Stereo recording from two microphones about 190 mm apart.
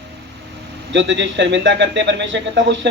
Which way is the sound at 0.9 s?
70° right (ahead or behind).